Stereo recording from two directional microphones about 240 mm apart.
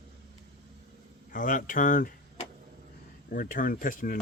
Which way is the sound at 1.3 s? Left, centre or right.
Left.